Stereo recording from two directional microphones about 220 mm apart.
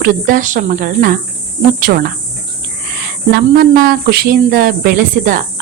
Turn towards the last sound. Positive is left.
turn(degrees=-40)  # may be behind; listen again after turning